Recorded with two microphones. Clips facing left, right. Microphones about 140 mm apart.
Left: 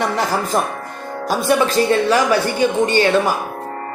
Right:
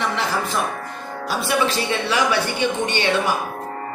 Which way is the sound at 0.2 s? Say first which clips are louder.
Left 4 dB; 45° left (ahead or behind).